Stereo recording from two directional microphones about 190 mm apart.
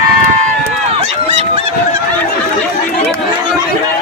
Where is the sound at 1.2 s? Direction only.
35° right (ahead or behind).